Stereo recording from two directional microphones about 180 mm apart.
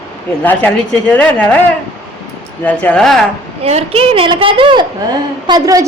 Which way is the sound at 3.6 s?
35° right (ahead or behind).